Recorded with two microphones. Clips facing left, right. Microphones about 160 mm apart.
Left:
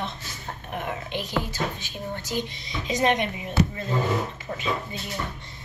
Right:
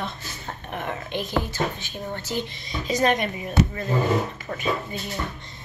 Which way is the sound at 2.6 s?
45° right (ahead or behind).